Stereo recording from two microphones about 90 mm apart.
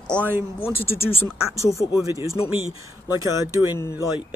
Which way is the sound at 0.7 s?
25° left (ahead or behind).